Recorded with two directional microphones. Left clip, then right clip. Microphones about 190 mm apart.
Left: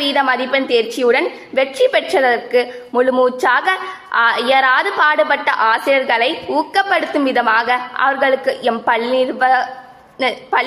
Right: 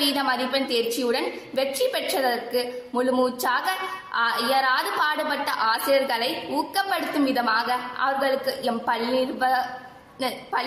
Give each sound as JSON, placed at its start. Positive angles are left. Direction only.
{"t": 0.0, "sound": "a woman's voice", "side_deg": 40}